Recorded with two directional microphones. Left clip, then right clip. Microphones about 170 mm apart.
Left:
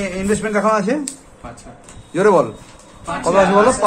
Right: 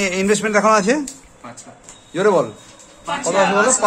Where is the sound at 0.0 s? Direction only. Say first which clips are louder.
Right 3 dB; 35° right (ahead or behind).